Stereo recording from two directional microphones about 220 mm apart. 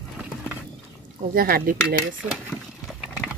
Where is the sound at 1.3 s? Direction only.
40° right (ahead or behind).